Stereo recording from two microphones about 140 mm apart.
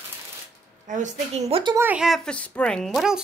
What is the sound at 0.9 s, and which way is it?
Speech, 60° right (ahead or behind).